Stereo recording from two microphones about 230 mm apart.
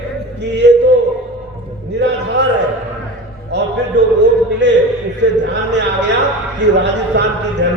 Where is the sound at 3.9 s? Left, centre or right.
Right.